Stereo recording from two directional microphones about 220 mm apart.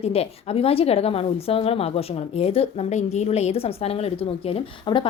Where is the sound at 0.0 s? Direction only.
25° left (ahead or behind).